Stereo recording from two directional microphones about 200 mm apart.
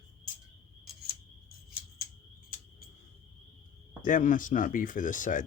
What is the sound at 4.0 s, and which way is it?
Speech, 40° left (ahead or behind).